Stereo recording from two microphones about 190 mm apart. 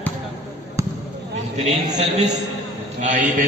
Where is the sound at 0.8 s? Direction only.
15° right (ahead or behind).